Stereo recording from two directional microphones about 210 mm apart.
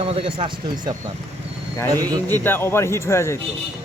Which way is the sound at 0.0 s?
25° right (ahead or behind).